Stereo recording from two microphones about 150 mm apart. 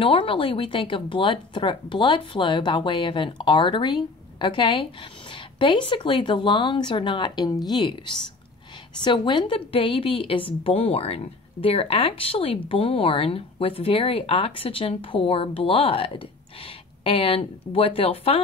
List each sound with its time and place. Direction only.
0.0 s speech: 35° left (ahead or behind)
9.0 s speech: 30° left (ahead or behind)